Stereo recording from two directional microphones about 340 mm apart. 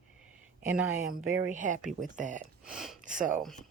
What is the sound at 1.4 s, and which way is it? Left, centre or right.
Speech, right.